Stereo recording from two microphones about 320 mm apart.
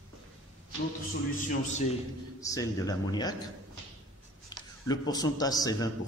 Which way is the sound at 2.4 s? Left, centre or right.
Centre.